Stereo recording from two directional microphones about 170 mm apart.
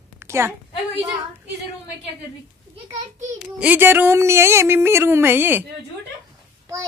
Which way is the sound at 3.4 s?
10° right (ahead or behind).